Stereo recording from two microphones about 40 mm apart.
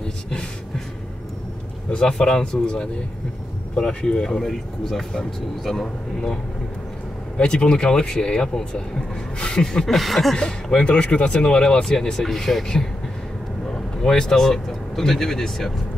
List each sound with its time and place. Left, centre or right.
1.9 s speech: centre
7.3 s speech: left
9.8 s a sound: centre
10.3 s speech: left